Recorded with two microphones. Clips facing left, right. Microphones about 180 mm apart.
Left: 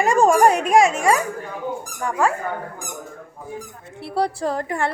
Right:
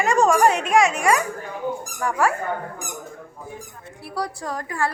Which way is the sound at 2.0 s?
20° left (ahead or behind).